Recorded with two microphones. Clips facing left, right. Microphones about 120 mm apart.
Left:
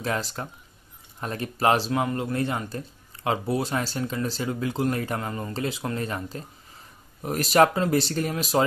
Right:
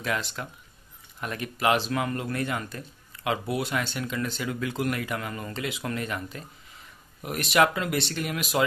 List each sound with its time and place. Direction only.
0.0 s speech: 35° left (ahead or behind)